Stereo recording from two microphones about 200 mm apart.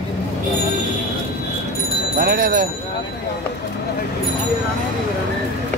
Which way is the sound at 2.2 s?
45° right (ahead or behind).